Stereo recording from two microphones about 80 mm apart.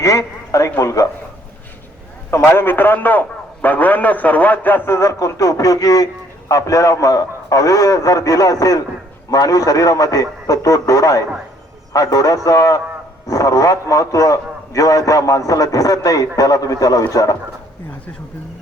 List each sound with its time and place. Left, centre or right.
0.0 s speech: left
2.3 s a man's voice: left
4.9 s a man's voice: left